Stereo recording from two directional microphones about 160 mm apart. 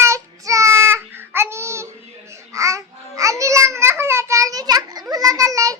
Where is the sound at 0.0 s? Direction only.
20° right (ahead or behind).